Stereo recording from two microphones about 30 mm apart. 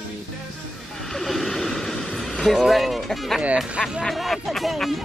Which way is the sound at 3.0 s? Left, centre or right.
Centre.